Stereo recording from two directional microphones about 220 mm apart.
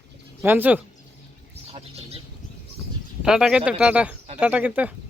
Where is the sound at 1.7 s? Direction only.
30° right (ahead or behind).